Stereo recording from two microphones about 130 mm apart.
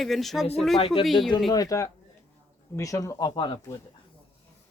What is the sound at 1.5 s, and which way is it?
Speech, 30° left (ahead or behind).